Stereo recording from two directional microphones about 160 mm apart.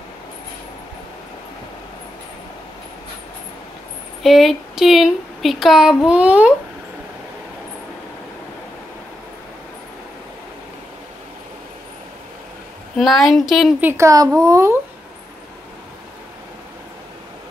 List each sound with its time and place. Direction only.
4.2 s speech: centre (ahead or behind)
12.9 s speech: centre (ahead or behind)
13.8 s speech: 20° right (ahead or behind)